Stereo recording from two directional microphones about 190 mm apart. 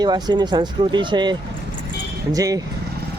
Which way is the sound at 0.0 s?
20° right (ahead or behind).